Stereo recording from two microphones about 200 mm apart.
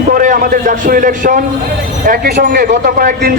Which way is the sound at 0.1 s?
45° right (ahead or behind).